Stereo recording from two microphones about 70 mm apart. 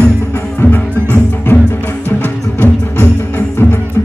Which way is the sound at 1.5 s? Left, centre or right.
Left.